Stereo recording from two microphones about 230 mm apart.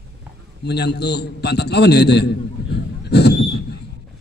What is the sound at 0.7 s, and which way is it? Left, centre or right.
A man's voice, left.